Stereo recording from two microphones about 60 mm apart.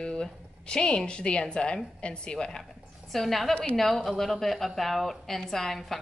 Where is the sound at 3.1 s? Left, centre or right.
Centre.